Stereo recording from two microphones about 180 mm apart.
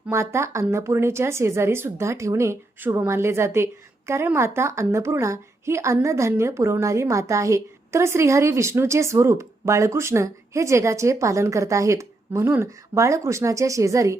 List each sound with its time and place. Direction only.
0.1 s speech: 15° right (ahead or behind)